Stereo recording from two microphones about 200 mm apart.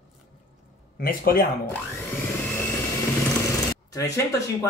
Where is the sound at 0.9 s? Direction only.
50° left (ahead or behind).